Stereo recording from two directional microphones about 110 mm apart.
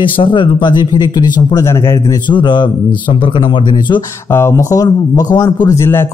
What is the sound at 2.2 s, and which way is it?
A man's voice, 45° left (ahead or behind).